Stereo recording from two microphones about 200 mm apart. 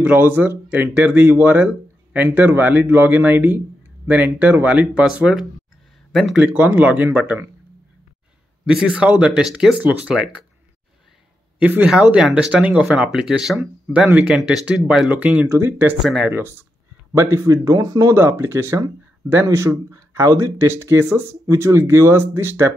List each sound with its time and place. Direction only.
0.0 s speech: 10° right (ahead or behind)
8.6 s speech: 5° right (ahead or behind)
11.6 s speech: 5° right (ahead or behind)